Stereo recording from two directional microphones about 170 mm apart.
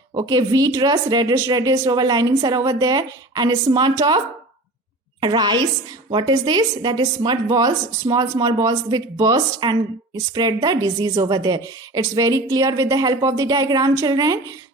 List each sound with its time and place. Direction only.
0.1 s speech: 25° right (ahead or behind)
5.2 s speech: 25° right (ahead or behind)